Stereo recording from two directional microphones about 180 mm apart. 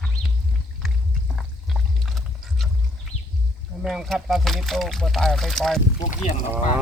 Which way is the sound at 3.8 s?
Centre (ahead or behind).